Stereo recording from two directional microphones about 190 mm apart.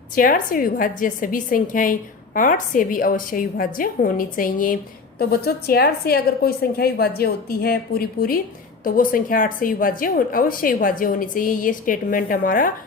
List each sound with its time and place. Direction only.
0.2 s a woman's voice: 50° left (ahead or behind)